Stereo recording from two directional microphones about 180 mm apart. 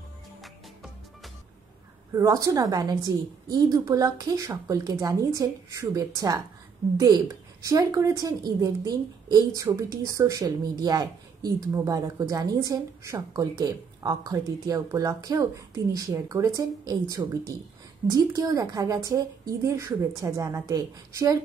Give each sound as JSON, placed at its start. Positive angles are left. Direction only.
{"t": 2.1, "sound": "speech", "side_deg": -20}
{"t": 7.6, "sound": "a woman's voice", "side_deg": -20}